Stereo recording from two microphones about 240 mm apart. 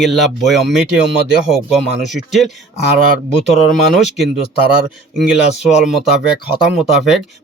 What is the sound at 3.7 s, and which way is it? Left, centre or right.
Speech, centre.